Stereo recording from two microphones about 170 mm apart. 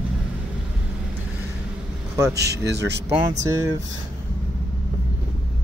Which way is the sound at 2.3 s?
75° right (ahead or behind).